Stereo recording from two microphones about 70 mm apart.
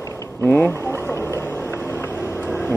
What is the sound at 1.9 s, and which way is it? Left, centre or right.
Vehicle, left.